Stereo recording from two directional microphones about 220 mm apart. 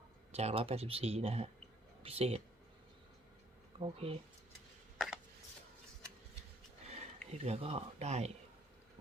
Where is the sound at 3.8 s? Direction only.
25° right (ahead or behind).